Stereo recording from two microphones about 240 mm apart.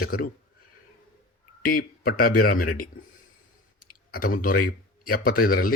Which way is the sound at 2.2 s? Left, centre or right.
Left.